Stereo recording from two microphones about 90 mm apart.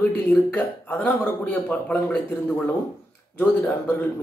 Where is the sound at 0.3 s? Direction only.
20° left (ahead or behind).